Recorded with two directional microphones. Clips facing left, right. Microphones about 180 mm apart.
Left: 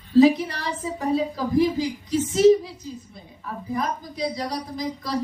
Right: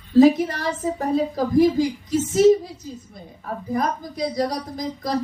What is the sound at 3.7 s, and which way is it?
Speech, 45° right (ahead or behind).